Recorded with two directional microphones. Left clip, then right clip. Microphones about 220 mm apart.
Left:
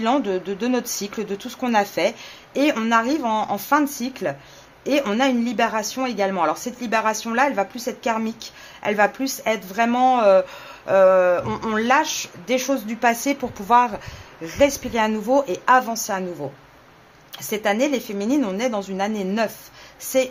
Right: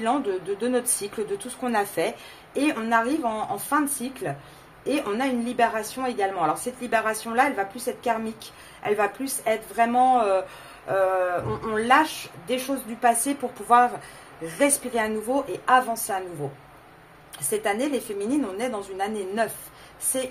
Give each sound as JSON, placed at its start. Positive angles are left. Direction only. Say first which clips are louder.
{"t": 0.0, "sound": "speech", "louder": "left 4 dB", "side_deg": 35}
{"t": 17.5, "sound": "speech", "louder": "left 4 dB", "side_deg": 35}